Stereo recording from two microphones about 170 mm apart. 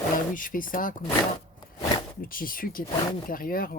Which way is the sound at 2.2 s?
55° left (ahead or behind).